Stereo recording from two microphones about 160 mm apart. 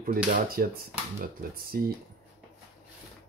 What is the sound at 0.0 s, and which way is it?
Speech, 60° right (ahead or behind).